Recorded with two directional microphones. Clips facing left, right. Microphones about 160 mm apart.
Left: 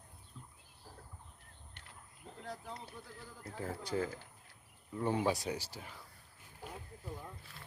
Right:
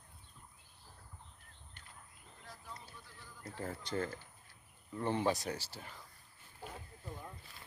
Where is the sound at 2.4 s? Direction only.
65° left (ahead or behind).